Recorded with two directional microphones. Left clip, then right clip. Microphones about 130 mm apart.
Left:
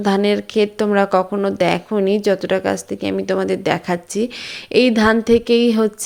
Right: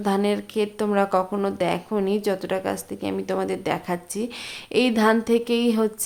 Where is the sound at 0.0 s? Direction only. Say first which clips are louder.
Left 6 dB; 30° left (ahead or behind).